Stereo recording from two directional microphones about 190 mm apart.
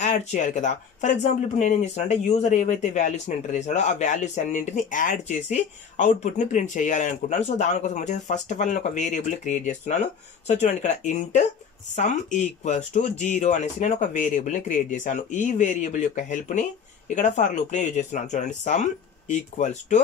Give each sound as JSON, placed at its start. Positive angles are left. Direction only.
{"t": 0.0, "sound": "speech", "side_deg": 40}